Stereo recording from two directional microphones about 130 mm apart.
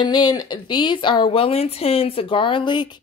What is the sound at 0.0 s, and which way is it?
Speech, 35° left (ahead or behind).